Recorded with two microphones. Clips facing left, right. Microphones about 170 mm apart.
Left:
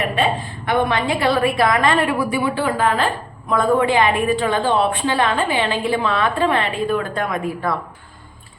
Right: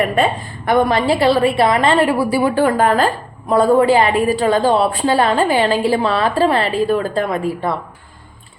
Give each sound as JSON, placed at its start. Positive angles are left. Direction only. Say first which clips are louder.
{"t": 0.2, "sound": "a woman's voice", "louder": "right 3 dB", "side_deg": -40}
{"t": 2.4, "sound": "a woman's voice", "louder": "right 5 dB", "side_deg": -45}